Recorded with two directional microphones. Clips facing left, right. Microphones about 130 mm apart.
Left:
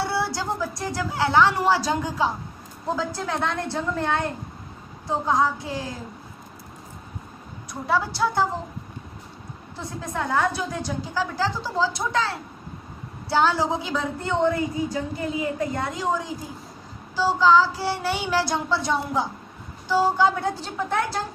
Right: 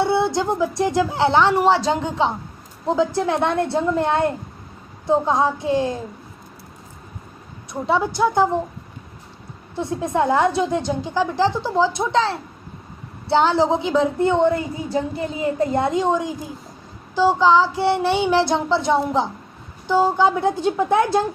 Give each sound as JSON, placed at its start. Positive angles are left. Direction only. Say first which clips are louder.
{"t": 0.0, "sound": "a woman's voice", "louder": "right 7 dB", "side_deg": -20}
{"t": 7.7, "sound": "a woman's voice", "louder": "right 4 dB", "side_deg": -20}
{"t": 9.8, "sound": "a woman's voice", "louder": "right 9 dB", "side_deg": -25}